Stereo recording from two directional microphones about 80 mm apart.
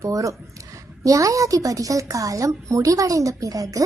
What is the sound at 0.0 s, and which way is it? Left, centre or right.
A woman's voice, right.